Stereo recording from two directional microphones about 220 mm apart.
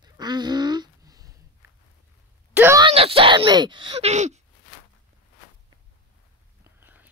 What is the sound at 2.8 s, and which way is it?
Speech, 25° right (ahead or behind).